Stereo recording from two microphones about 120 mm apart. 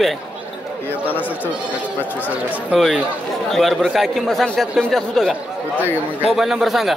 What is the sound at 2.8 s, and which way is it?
A man's voice, centre (ahead or behind).